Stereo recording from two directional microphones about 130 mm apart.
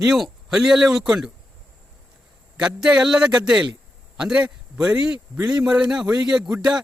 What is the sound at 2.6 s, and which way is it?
A man's voice, 5° right (ahead or behind).